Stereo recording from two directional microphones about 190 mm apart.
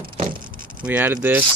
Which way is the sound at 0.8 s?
10° right (ahead or behind).